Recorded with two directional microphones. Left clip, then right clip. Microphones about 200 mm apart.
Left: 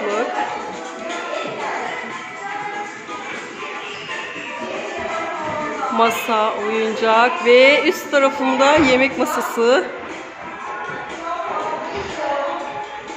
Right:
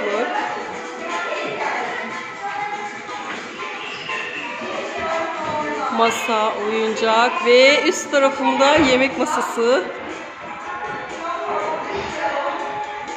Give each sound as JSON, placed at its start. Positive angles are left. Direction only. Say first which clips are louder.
{"t": 5.9, "sound": "a woman's voice", "louder": "left 2 dB", "side_deg": 5}